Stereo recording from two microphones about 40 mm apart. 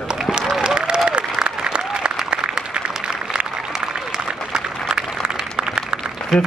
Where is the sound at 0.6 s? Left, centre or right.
Right.